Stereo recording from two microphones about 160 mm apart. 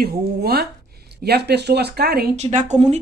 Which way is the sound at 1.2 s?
90° right.